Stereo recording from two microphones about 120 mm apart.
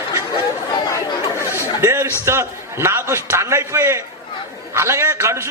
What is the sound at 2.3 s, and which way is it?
A man's voice, 20° right (ahead or behind).